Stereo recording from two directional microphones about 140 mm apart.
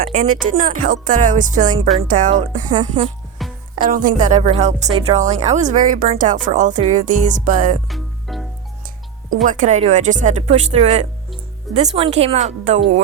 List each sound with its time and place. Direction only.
0.1 s speech: 75° right (ahead or behind)
2.6 s speech: 30° right (ahead or behind)
3.4 s music: centre (ahead or behind)
3.8 s speech: 75° right (ahead or behind)
7.9 s music: centre (ahead or behind)
9.3 s speech: 65° right (ahead or behind)